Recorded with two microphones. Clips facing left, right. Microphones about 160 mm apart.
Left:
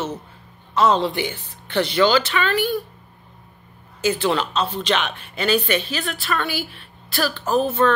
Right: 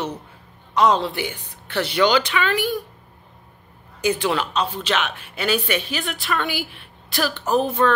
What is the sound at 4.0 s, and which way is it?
Speech, 15° right (ahead or behind).